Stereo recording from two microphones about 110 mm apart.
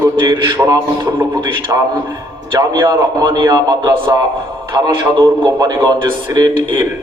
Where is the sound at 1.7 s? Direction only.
30° right (ahead or behind).